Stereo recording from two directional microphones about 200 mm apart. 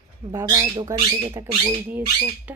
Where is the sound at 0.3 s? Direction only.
15° right (ahead or behind).